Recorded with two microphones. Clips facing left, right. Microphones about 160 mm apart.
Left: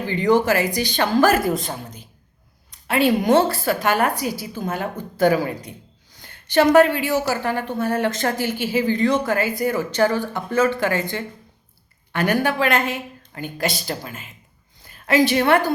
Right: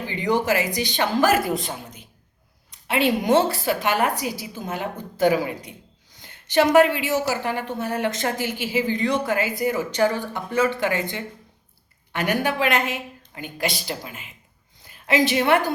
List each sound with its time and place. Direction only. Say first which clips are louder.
0.1 s speech: left 4 dB; 15° right (ahead or behind)
1.5 s a woman's voice: left 3 dB; 40° left (ahead or behind)
3.2 s a woman's voice: even; 20° right (ahead or behind)
3.7 s a woman's voice: left 2 dB; 45° left (ahead or behind)
4.2 s a woman's voice: left 3 dB; 15° right (ahead or behind)
13.6 s a woman's voice: left 2 dB; 45° left (ahead or behind)
15.1 s speech: left 2 dB; 20° right (ahead or behind)